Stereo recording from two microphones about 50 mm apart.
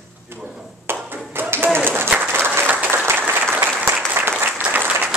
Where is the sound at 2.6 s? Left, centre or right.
Right.